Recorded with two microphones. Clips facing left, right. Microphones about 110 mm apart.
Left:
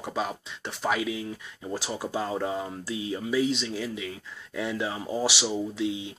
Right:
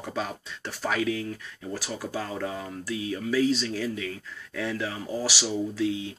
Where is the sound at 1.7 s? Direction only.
25° left (ahead or behind).